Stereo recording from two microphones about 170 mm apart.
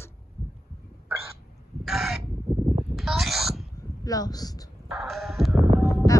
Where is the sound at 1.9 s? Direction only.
5° right (ahead or behind).